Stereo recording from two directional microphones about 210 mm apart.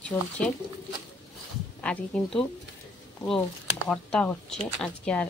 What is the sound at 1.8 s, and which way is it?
Speech, 5° left (ahead or behind).